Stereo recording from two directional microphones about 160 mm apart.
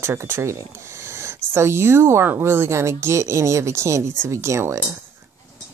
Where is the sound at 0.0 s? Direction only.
15° right (ahead or behind).